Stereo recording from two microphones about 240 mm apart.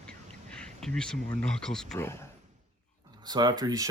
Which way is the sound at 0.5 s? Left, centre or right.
Centre.